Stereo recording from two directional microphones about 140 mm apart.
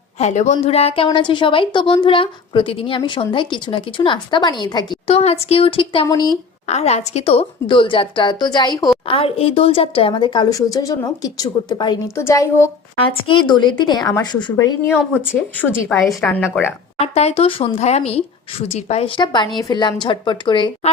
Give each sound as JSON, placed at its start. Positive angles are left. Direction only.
{"t": 0.2, "sound": "a woman's voice", "side_deg": 55}
{"t": 5.0, "sound": "a woman's voice", "side_deg": 45}
{"t": 6.7, "sound": "a woman's voice", "side_deg": 50}
{"t": 9.0, "sound": "a woman's voice", "side_deg": 40}
{"t": 13.0, "sound": "a woman's voice", "side_deg": 35}
{"t": 15.1, "sound": "speech", "side_deg": -10}
{"t": 16.2, "sound": "a woman's voice", "side_deg": 10}
{"t": 17.0, "sound": "a woman's voice", "side_deg": 50}